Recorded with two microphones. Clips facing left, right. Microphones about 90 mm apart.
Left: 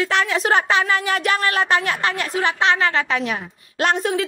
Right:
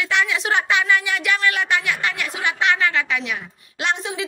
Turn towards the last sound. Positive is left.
turn(degrees=50)  # may be behind; listen again after turning